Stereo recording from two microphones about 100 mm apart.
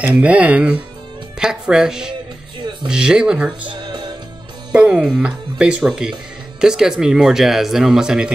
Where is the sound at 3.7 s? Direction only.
50° right (ahead or behind).